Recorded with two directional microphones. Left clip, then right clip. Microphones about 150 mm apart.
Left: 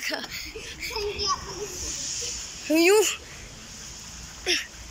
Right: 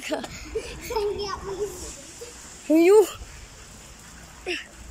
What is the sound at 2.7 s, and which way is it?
Speech, 25° right (ahead or behind).